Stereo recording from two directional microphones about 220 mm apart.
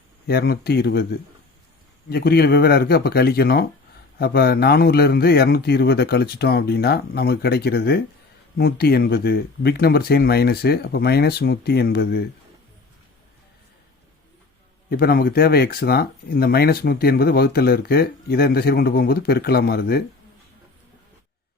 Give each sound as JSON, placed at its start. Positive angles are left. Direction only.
{"t": 0.3, "sound": "speech", "side_deg": 45}
{"t": 2.0, "sound": "speech", "side_deg": 45}
{"t": 14.8, "sound": "speech", "side_deg": 45}